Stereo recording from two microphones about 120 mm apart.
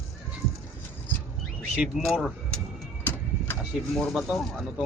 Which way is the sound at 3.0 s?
15° left (ahead or behind).